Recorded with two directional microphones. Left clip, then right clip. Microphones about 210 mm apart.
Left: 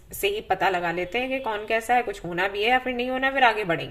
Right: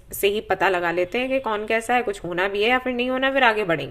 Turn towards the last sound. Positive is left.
turn(degrees=-25)  # may be behind; listen again after turning